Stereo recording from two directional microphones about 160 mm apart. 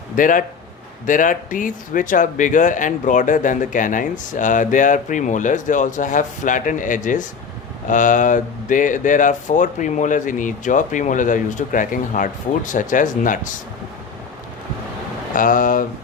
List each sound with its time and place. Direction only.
0.2 s speech: 55° left (ahead or behind)
15.3 s speech: 55° left (ahead or behind)